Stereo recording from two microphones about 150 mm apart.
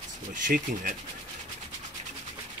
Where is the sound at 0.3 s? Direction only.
60° right (ahead or behind).